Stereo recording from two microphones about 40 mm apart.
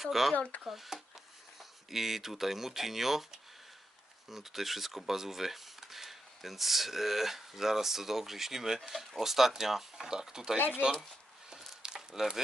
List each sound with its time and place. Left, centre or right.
0.0 s speech: centre
10.7 s speech: right
11.8 s a sound: centre